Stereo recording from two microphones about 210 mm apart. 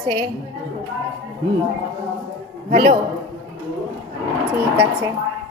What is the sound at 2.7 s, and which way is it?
Speech, 35° right (ahead or behind).